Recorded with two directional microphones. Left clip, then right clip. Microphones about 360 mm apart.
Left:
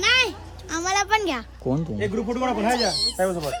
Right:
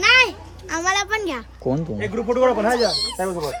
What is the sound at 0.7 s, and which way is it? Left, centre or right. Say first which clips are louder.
Speech: right 1 dB; centre.